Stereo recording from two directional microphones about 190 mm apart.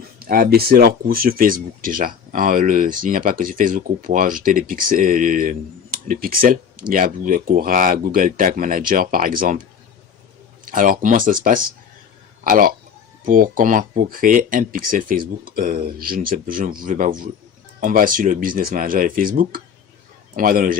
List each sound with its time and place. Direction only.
0.2 s speech: 50° right (ahead or behind)
10.7 s speech: 45° right (ahead or behind)